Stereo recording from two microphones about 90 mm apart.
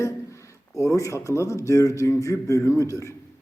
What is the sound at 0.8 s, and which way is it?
Speech, 35° left (ahead or behind).